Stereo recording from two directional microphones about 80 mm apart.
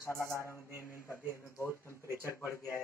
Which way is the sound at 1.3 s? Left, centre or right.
Left.